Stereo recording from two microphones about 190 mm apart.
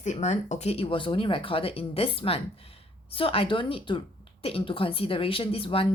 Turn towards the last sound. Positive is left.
turn(degrees=30)  # may be behind; listen again after turning